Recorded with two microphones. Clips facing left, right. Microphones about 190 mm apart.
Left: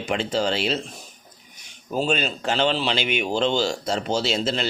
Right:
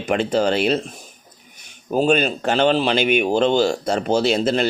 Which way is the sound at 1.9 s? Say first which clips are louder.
Right 6 dB; 55° right (ahead or behind).